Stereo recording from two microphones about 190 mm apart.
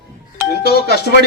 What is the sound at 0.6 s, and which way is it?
Speech, 55° left (ahead or behind).